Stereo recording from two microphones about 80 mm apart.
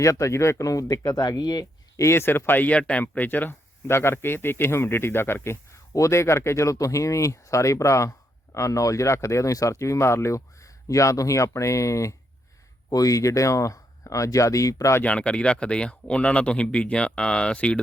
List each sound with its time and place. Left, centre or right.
0.0 s speech: left
2.0 s speech: left
15.0 s speech: centre